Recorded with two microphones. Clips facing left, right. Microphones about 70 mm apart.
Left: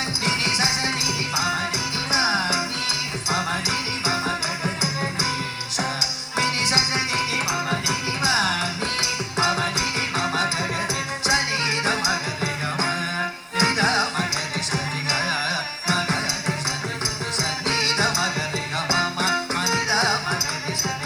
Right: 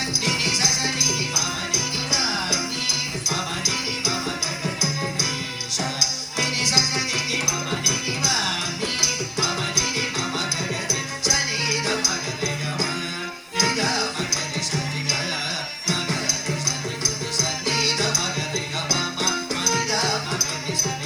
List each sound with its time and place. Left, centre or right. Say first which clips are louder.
0.3 s music: left 2 dB; left
5.7 s music: left 1 dB; left